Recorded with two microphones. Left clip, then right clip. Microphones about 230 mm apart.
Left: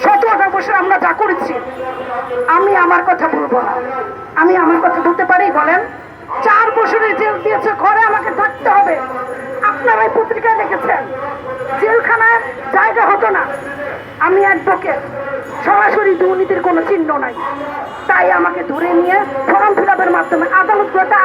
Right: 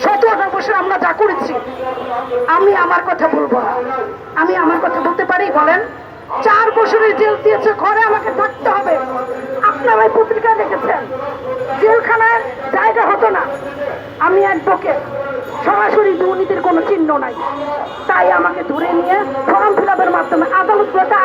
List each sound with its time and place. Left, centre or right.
0.0 s chatter: right
2.5 s a sound: right
9.6 s a woman's voice: right